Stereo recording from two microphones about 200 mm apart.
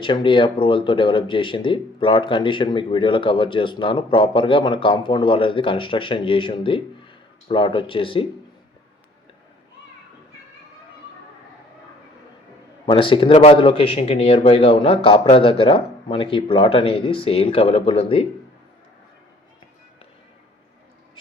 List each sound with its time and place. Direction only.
0.0 s speech: 25° left (ahead or behind)
12.8 s speech: 25° left (ahead or behind)